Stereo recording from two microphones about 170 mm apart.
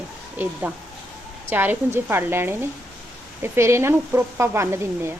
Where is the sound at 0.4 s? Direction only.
10° right (ahead or behind).